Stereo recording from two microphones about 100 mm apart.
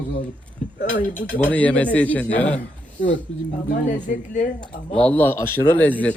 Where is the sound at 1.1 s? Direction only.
15° left (ahead or behind).